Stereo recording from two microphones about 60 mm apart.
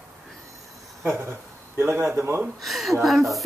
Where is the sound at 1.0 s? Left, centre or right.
Right.